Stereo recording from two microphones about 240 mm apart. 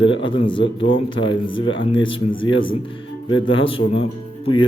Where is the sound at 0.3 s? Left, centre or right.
Left.